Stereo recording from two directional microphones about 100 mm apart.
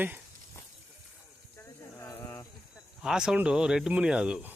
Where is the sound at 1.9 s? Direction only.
25° left (ahead or behind).